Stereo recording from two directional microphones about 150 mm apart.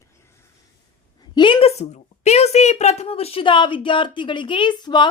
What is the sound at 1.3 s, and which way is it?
A woman's voice, 35° left (ahead or behind).